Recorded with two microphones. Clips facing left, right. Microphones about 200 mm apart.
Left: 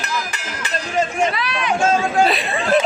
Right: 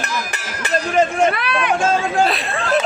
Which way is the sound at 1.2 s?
55° right (ahead or behind).